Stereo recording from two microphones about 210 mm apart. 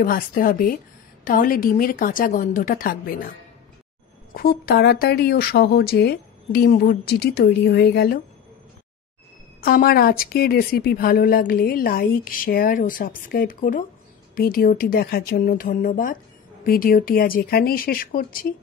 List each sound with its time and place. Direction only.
0.0 s a woman's voice: 45° left (ahead or behind)
9.6 s a woman's voice: 45° left (ahead or behind)